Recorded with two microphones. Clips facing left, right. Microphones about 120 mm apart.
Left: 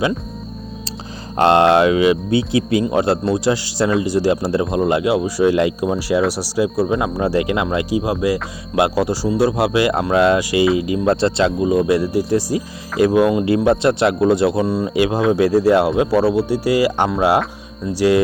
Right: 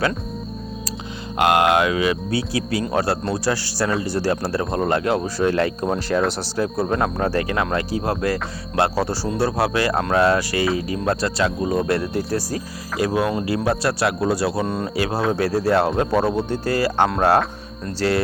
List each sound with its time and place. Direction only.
1.4 s speech: 30° left (ahead or behind)
11.6 s speech: 10° left (ahead or behind)
14.6 s speech: 5° left (ahead or behind)
14.9 s speech: 20° left (ahead or behind)